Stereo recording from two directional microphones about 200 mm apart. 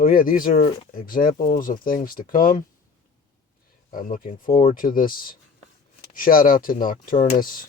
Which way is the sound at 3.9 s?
45° left (ahead or behind).